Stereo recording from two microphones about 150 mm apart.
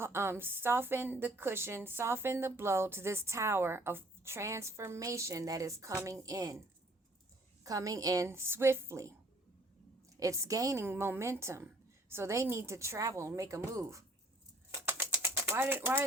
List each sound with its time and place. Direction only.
0.0 s a woman's voice: 15° right (ahead or behind)
7.6 s a woman's voice: 25° right (ahead or behind)
10.2 s a woman's voice: 20° right (ahead or behind)
14.8 s a sound: 15° right (ahead or behind)